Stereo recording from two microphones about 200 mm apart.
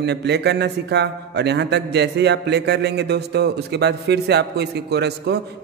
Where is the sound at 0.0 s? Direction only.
55° right (ahead or behind).